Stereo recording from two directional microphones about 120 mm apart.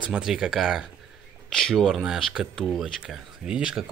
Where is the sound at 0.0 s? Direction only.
5° right (ahead or behind).